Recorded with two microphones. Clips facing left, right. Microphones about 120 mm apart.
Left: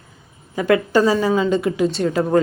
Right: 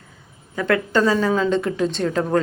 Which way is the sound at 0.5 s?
10° left (ahead or behind).